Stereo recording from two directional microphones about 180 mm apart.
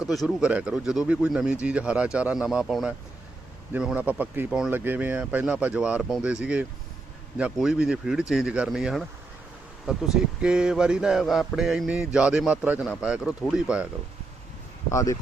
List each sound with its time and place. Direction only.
0.1 s speech: centre (ahead or behind)
14.8 s speech: 15° left (ahead or behind)